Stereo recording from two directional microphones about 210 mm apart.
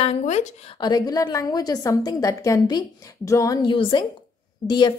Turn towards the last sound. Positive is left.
turn(degrees=20)  # may be behind; listen again after turning